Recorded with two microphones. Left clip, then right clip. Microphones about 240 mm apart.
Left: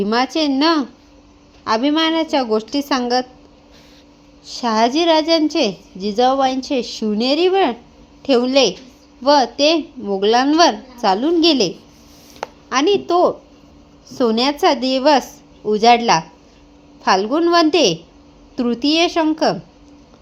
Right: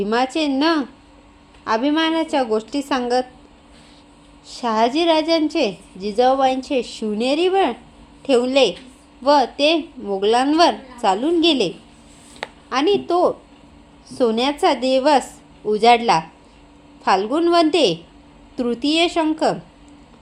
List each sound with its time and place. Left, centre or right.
0.0 s a woman's voice: left
4.4 s a woman's voice: left